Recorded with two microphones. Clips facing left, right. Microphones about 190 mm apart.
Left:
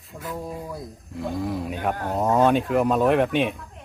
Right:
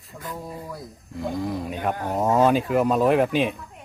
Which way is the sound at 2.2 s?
Centre (ahead or behind).